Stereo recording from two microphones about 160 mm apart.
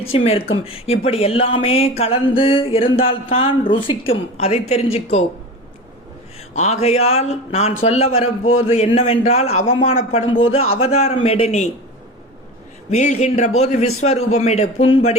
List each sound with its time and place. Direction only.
0.1 s speech: 35° left (ahead or behind)
6.6 s speech: 40° left (ahead or behind)
12.9 s a man's voice: 45° left (ahead or behind)